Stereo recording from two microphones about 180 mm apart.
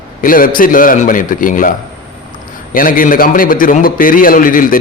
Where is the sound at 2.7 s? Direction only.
50° left (ahead or behind).